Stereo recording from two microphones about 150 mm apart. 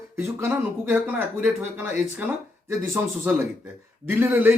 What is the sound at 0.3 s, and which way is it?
Speech, 15° right (ahead or behind).